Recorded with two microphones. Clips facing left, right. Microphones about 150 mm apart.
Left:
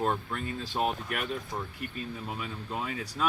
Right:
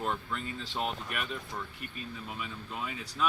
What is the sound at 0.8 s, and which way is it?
Speech, 45° left (ahead or behind).